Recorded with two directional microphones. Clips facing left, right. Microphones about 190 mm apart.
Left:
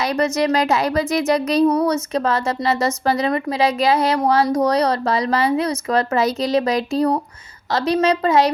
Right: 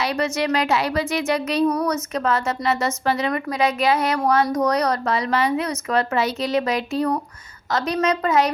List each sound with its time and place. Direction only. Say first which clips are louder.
0.0 s speech: left 4 dB; 40° left (ahead or behind)
1.6 s a woman's voice: left 4 dB; 25° left (ahead or behind)